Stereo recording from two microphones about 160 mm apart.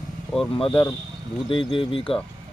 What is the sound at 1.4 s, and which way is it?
Speech, 35° left (ahead or behind).